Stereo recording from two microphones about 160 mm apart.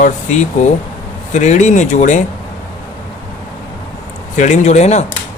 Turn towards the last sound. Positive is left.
turn(degrees=45)  # may be behind; listen again after turning